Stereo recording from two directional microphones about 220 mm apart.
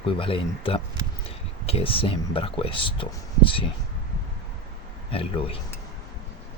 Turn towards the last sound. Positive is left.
turn(degrees=25)  # may be behind; listen again after turning